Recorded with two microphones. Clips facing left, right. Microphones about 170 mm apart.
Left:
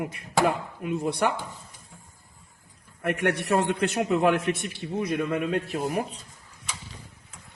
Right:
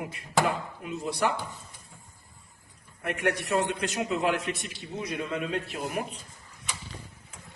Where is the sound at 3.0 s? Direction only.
60° left (ahead or behind).